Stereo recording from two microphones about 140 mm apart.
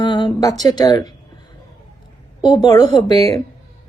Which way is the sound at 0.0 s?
35° left (ahead or behind).